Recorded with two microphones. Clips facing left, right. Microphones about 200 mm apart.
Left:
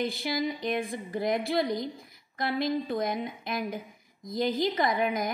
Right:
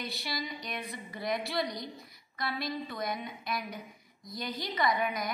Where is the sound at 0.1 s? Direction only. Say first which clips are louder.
Left 8 dB; 50° left (ahead or behind).